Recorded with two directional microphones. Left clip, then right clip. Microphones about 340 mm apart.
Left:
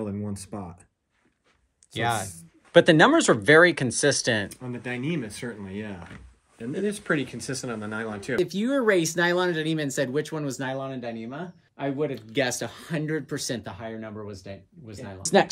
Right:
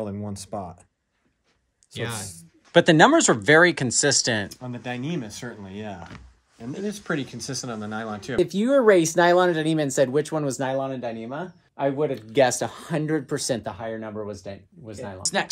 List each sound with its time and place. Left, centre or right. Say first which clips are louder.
0.0 s speech: right 1 dB; right
2.0 s speech: left 6 dB; centre
6.9 s speech: left 1 dB; right
8.4 s speech: right 6 dB; centre